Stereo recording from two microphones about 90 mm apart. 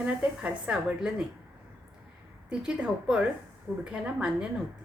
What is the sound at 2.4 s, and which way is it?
A woman's voice, 10° right (ahead or behind).